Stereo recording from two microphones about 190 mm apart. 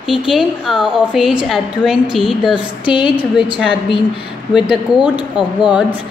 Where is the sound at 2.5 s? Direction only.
25° left (ahead or behind).